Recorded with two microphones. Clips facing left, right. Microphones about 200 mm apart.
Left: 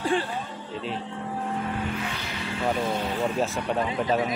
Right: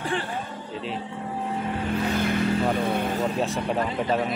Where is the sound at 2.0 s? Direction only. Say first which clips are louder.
Right 10 dB; 50° right (ahead or behind).